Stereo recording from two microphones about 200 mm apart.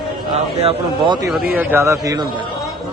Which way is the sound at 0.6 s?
25° right (ahead or behind).